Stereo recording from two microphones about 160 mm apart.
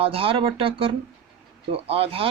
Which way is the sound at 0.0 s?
35° right (ahead or behind).